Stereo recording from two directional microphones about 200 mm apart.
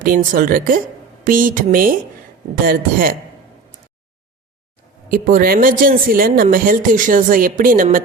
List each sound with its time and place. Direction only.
0.0 s speech: 45° right (ahead or behind)
5.1 s speech: 45° right (ahead or behind)